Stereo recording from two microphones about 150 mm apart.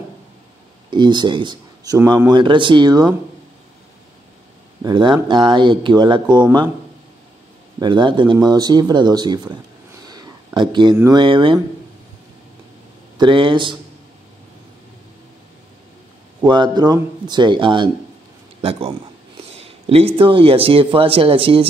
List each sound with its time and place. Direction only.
0.8 s speech: 30° right (ahead or behind)
4.8 s speech: 30° right (ahead or behind)
7.8 s speech: 30° right (ahead or behind)
10.0 s a sound: 25° right (ahead or behind)
11.1 s speech: 35° right (ahead or behind)
13.2 s speech: 35° right (ahead or behind)
16.3 s speech: 30° right (ahead or behind)
19.3 s a sound: 40° right (ahead or behind)
20.2 s speech: 35° right (ahead or behind)